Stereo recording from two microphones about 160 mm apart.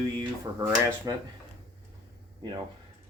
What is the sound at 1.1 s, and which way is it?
Speech, 20° right (ahead or behind).